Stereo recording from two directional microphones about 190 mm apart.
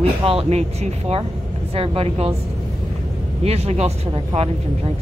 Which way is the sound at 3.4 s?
35° right (ahead or behind).